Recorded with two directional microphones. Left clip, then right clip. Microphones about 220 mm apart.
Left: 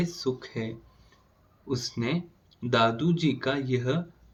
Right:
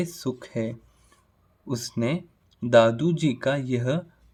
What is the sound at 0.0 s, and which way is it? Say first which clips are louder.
Speech: even; 55° right (ahead or behind).